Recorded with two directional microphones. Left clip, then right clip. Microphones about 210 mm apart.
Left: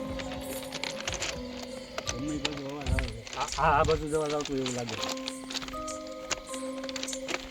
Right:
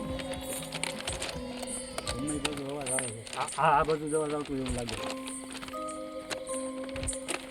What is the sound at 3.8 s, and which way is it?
Speech, 50° left (ahead or behind).